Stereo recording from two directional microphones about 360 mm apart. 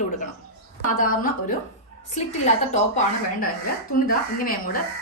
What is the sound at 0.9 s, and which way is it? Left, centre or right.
Speech, left.